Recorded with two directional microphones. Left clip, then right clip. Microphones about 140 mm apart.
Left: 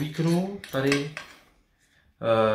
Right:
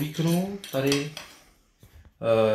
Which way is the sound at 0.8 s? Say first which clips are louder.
Left 1 dB; centre (ahead or behind).